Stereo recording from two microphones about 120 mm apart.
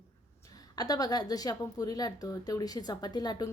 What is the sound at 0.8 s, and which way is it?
A woman's voice, 30° left (ahead or behind).